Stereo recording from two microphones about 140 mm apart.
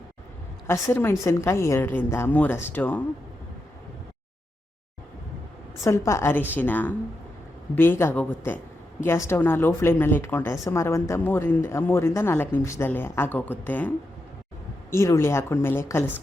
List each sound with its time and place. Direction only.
0.7 s a woman's voice: 20° left (ahead or behind)
6.1 s a woman's voice: 20° left (ahead or behind)